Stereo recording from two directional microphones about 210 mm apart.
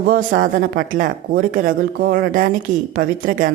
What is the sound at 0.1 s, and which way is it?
Speech, 45° right (ahead or behind).